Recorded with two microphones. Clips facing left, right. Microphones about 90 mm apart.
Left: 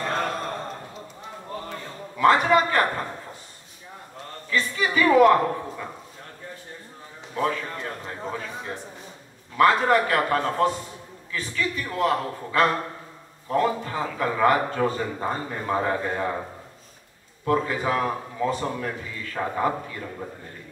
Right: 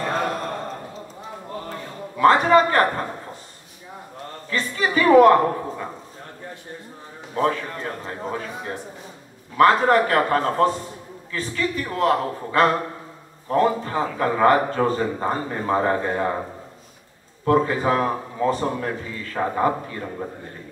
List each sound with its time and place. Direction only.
0.0 s a sound: 10° right (ahead or behind)
2.1 s speech: 40° right (ahead or behind)
4.5 s speech: 40° right (ahead or behind)
7.3 s a man's voice: 40° right (ahead or behind)
17.5 s speech: 40° right (ahead or behind)